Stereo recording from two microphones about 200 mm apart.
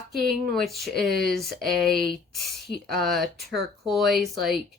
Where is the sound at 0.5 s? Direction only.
Centre (ahead or behind).